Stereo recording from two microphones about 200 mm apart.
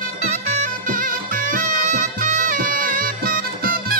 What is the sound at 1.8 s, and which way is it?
Music, 40° right (ahead or behind).